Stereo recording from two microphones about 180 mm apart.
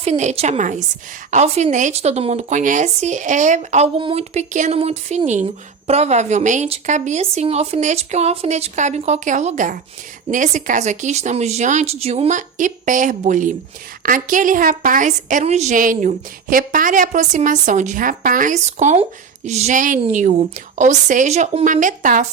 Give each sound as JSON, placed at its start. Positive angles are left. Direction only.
{"t": 0.0, "sound": "a woman's voice", "side_deg": -40}